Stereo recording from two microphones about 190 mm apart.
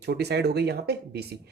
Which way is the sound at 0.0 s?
60° right (ahead or behind).